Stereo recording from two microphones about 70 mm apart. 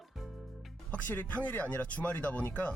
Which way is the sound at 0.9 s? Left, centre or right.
Left.